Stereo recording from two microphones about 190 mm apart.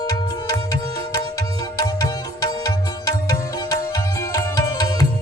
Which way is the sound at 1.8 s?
20° left (ahead or behind).